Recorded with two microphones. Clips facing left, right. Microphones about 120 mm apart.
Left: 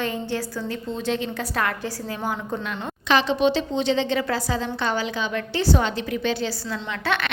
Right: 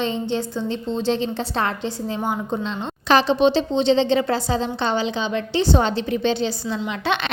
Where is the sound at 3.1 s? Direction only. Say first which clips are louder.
Right 3 dB; 35° right (ahead or behind).